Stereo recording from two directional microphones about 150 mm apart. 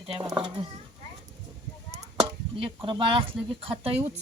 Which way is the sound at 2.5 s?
35° right (ahead or behind).